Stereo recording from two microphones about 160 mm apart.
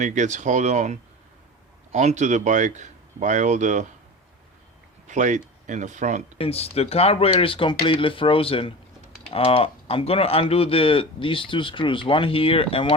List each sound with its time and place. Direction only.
0.0 s speech: 50° right (ahead or behind)
5.0 s speech: 50° right (ahead or behind)
6.4 s speech: 40° left (ahead or behind)